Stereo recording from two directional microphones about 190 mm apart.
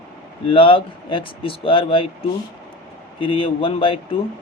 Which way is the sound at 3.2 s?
25° left (ahead or behind).